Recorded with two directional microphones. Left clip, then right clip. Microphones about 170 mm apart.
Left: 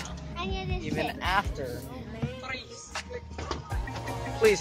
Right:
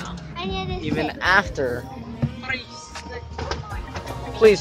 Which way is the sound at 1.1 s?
20° right (ahead or behind).